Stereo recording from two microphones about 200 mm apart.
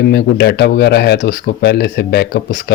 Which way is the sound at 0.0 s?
55° left (ahead or behind).